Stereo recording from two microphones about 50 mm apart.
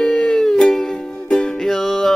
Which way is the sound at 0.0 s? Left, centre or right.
Centre.